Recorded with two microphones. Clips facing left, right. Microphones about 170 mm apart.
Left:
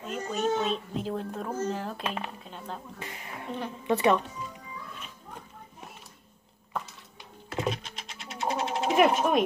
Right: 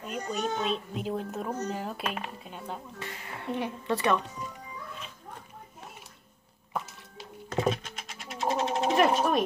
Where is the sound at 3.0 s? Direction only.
15° left (ahead or behind).